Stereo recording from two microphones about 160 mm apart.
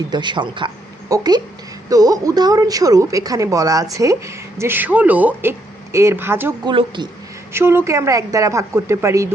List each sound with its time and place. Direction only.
0.1 s a woman's voice: 30° right (ahead or behind); by 6.5 s 15° right (ahead or behind)
6.7 s a woman's voice: 30° right (ahead or behind)
7.5 s speech: 15° right (ahead or behind)